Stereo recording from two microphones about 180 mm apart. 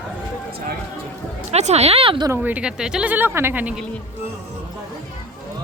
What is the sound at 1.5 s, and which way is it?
Speech, 40° right (ahead or behind).